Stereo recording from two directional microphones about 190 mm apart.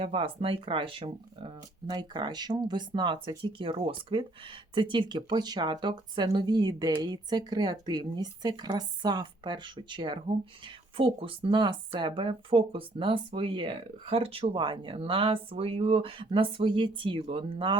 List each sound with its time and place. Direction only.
0.0 s speech: 30° right (ahead or behind)